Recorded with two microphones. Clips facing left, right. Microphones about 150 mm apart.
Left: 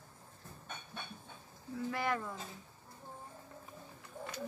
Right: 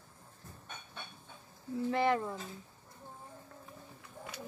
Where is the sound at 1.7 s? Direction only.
25° right (ahead or behind).